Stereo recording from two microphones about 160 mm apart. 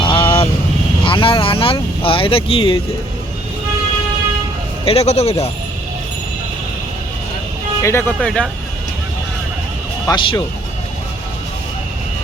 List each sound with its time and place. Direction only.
0.0 s vehicle: 30° left (ahead or behind)
1.0 s speech: 35° left (ahead or behind)
4.9 s a man's voice: 40° left (ahead or behind)
7.8 s speech: 15° left (ahead or behind)
10.1 s speech: 30° left (ahead or behind)